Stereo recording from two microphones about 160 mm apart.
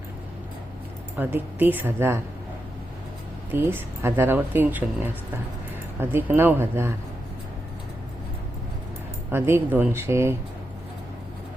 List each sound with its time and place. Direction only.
1.1 s speech: 10° right (ahead or behind)
3.5 s speech: 15° right (ahead or behind)
9.3 s speech: 15° right (ahead or behind)